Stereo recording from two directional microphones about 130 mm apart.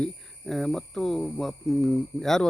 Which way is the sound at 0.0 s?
Centre (ahead or behind).